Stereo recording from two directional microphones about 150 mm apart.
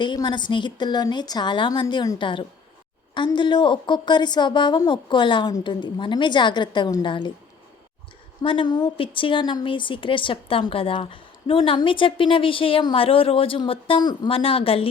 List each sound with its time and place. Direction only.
0.0 s a woman's voice: 30° left (ahead or behind)
8.4 s a woman's voice: 30° left (ahead or behind)